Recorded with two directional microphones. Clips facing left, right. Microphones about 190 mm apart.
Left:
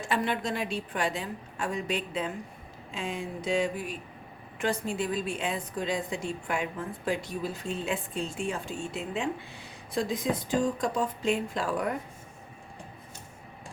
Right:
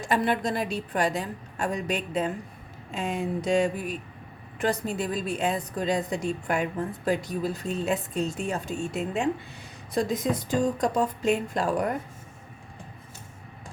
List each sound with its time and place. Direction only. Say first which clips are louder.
0.0 s a woman's voice: right 4 dB; 40° right (ahead or behind)
2.9 s a sound: right 6 dB; 45° right (ahead or behind)
4.6 s a woman's voice: right 2 dB; 40° right (ahead or behind)